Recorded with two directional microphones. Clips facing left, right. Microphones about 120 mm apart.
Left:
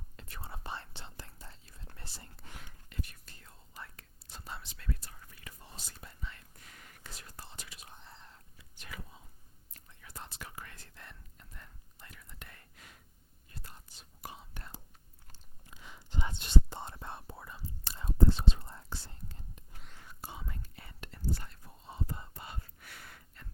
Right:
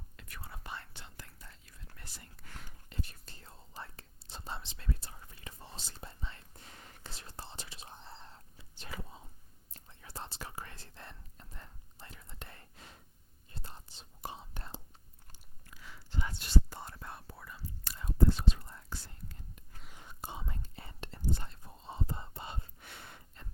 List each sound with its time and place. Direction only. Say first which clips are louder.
0.2 s whispering: left 3 dB; 30° left (ahead or behind)
2.9 s whispering: even; 30° right (ahead or behind)
15.6 s whispering: left 1 dB; 20° left (ahead or behind)
19.9 s whispering: right 2 dB; 20° right (ahead or behind)